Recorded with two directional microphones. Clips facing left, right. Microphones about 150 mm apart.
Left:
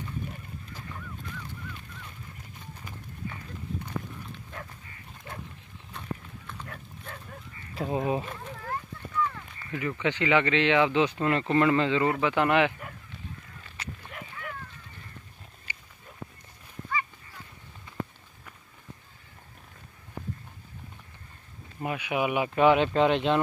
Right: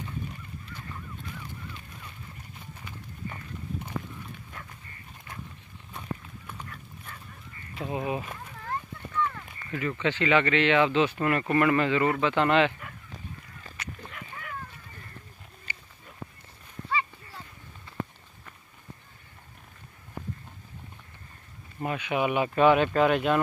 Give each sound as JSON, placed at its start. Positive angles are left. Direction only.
{"t": 7.7, "sound": "speech", "side_deg": 35}
{"t": 9.1, "sound": "speech", "side_deg": 5}
{"t": 13.8, "sound": "goose", "side_deg": 30}
{"t": 15.7, "sound": "a sound", "side_deg": 15}
{"t": 21.8, "sound": "speech", "side_deg": 10}